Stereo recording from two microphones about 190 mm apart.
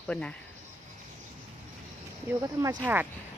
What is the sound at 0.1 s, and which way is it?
Speech, 5° left (ahead or behind).